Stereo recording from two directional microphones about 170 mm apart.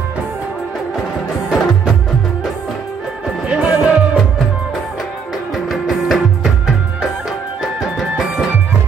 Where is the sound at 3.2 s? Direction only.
5° right (ahead or behind).